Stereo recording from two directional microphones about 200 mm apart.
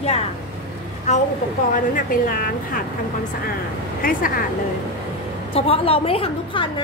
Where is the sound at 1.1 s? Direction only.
35° left (ahead or behind).